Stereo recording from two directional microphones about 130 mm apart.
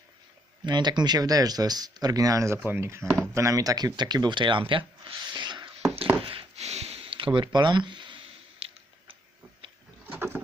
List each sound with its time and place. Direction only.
0.6 s speech: 35° right (ahead or behind); by 3.0 s 20° right (ahead or behind)
3.0 s speech: 5° left (ahead or behind)
3.3 s speech: 25° right (ahead or behind)
6.2 s a sound: 50° right (ahead or behind)
10.1 s rowboat: 15° right (ahead or behind)